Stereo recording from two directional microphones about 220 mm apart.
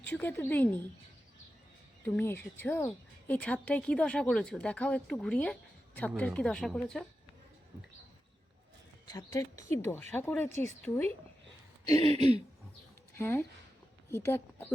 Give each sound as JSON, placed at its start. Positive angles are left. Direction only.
{"t": 0.0, "sound": "speech", "side_deg": 10}
{"t": 2.0, "sound": "speech", "side_deg": 10}
{"t": 9.1, "sound": "speech", "side_deg": 15}
{"t": 11.9, "sound": "a sound", "side_deg": -30}
{"t": 13.1, "sound": "speech", "side_deg": 10}